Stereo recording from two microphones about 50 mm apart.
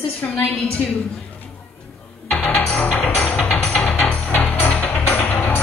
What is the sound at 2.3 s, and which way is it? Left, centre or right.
Music, left.